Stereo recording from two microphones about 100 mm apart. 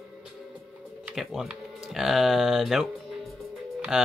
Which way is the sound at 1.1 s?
5° right (ahead or behind).